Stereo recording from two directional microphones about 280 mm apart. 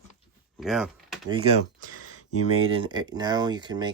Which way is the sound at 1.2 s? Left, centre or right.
Centre.